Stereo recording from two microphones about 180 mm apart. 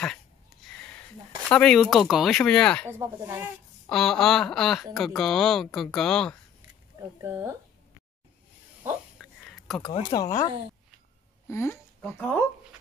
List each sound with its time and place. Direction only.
1.5 s speech: 5° left (ahead or behind)
3.0 s speech: 10° right (ahead or behind)
3.9 s speech: centre (ahead or behind)
7.0 s speech: 15° right (ahead or behind)
8.8 s a sound: centre (ahead or behind)
10.1 s speech: 20° left (ahead or behind)
11.4 s speech: 15° left (ahead or behind)